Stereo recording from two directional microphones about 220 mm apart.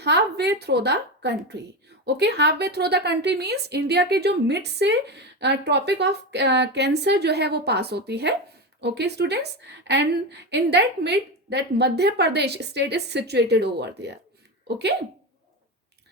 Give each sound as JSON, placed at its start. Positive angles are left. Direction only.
{"t": 0.0, "sound": "a woman's voice", "side_deg": -50}